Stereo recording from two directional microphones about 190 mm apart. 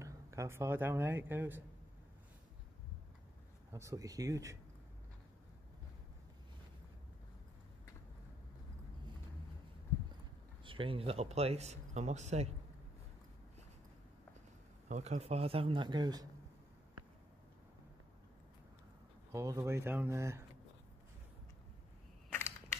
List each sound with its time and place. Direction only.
0.0 s speech: 15° right (ahead or behind)
3.7 s speech: 15° right (ahead or behind)
10.6 s speech: 25° right (ahead or behind)
14.9 s speech: 35° right (ahead or behind); by 16.3 s 20° right (ahead or behind)
19.3 s speech: 15° right (ahead or behind)